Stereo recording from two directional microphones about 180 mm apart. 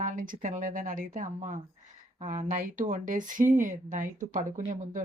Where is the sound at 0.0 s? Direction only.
45° right (ahead or behind).